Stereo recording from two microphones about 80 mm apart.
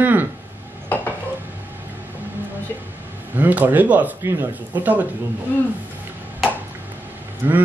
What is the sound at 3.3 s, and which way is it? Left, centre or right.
Speech, right.